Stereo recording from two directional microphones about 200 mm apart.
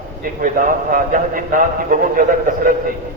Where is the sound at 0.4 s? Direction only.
45° right (ahead or behind).